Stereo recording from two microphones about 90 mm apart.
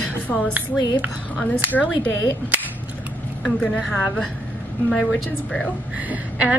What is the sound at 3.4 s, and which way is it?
Speech, 15° left (ahead or behind).